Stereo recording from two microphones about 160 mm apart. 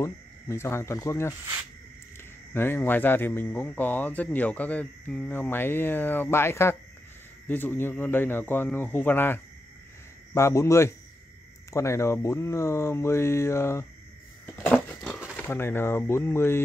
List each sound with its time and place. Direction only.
0.0 s speech: 15° left (ahead or behind)
14.4 s a sound: 10° left (ahead or behind)
15.3 s speech: 15° left (ahead or behind)